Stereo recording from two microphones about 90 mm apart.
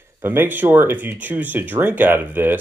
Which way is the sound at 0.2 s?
25° right (ahead or behind).